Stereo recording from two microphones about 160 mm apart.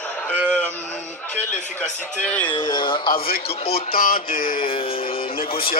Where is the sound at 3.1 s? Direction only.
70° left (ahead or behind).